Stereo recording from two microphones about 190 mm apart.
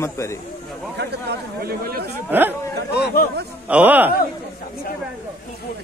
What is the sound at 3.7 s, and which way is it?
Speech, 5° right (ahead or behind).